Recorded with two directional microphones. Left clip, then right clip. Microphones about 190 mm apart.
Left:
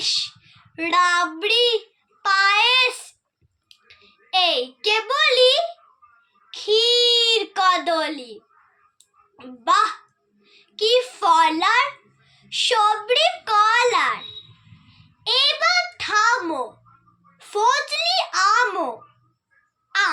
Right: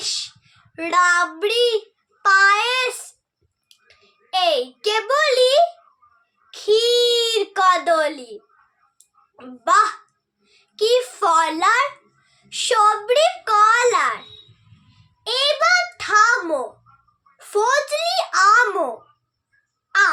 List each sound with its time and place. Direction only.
0.0 s child singing: 25° right (ahead or behind)
2.2 s a child's voice: 20° right (ahead or behind)
15.2 s a child's voice: 25° right (ahead or behind)